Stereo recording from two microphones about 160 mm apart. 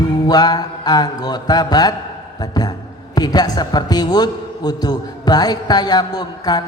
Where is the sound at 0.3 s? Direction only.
25° left (ahead or behind).